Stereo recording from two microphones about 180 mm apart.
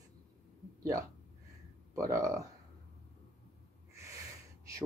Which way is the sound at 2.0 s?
20° right (ahead or behind).